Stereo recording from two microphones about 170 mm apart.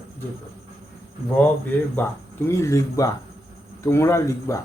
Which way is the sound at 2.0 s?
15° left (ahead or behind).